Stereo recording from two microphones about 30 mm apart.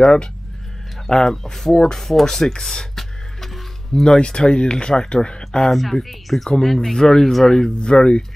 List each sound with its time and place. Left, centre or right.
0.0 s speech: left
1.1 s speech: centre
2.6 s a sound: centre
4.4 s speech: left
5.7 s a woman's voice: centre
7.6 s speech: left